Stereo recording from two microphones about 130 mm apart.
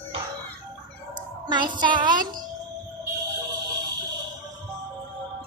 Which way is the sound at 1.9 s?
35° right (ahead or behind).